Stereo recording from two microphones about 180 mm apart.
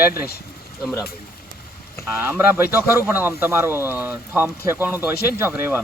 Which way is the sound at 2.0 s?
10° right (ahead or behind).